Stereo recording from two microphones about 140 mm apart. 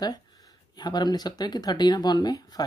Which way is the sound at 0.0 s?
25° left (ahead or behind).